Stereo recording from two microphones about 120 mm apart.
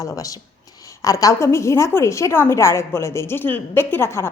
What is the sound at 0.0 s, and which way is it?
A woman's voice, 30° left (ahead or behind).